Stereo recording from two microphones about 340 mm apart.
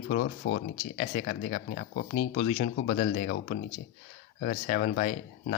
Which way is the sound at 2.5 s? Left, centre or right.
Left.